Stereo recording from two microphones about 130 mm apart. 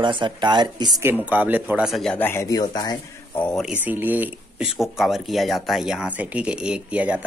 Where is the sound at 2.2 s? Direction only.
20° left (ahead or behind).